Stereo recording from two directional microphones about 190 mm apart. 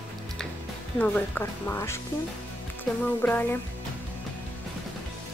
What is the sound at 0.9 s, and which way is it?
Speech, 10° left (ahead or behind).